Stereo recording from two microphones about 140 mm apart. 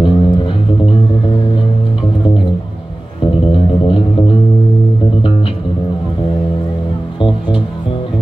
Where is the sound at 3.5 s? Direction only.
40° left (ahead or behind).